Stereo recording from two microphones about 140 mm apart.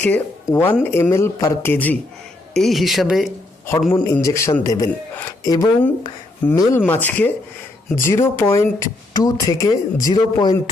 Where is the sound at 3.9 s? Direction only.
15° left (ahead or behind).